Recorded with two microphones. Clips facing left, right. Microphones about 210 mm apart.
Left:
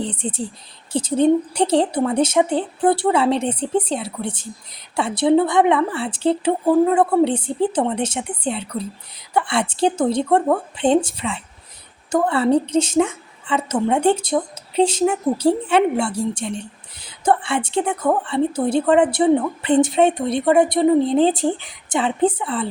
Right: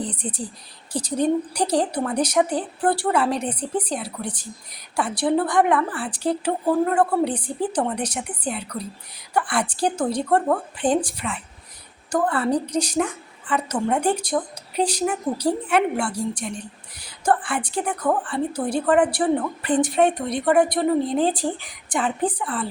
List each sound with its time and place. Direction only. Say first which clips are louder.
0.0 s a woman's voice: left 4 dB; 25° left (ahead or behind)